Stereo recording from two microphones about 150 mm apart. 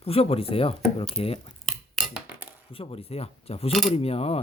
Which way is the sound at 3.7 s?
Centre (ahead or behind).